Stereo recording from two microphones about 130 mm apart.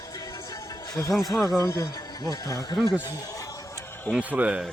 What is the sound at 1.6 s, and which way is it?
Speech, 25° left (ahead or behind).